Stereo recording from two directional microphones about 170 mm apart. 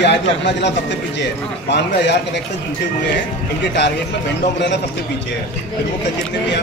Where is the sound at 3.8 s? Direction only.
90° left.